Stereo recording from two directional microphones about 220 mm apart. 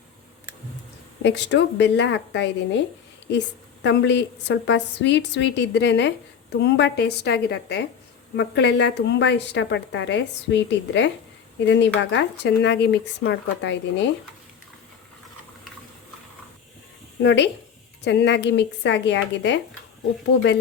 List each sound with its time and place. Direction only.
1.2 s a woman's voice: 50° left (ahead or behind)
17.2 s a woman's voice: 50° left (ahead or behind)